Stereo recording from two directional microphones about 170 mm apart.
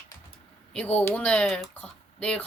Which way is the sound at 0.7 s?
5° left (ahead or behind).